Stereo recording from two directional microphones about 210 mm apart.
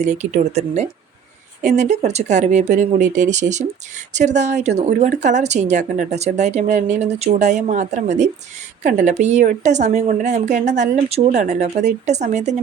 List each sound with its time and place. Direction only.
0.0 s speech: 35° right (ahead or behind)